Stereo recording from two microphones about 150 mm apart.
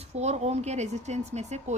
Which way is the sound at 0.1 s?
45° right (ahead or behind).